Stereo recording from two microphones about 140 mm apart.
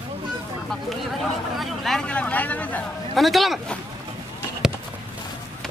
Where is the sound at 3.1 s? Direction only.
Centre (ahead or behind).